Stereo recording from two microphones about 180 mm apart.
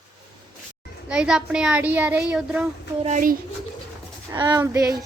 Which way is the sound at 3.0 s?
45° right (ahead or behind).